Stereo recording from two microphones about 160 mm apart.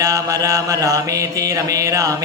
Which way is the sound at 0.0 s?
20° right (ahead or behind).